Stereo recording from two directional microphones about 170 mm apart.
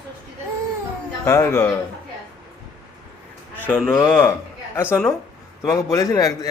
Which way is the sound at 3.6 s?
5° left (ahead or behind).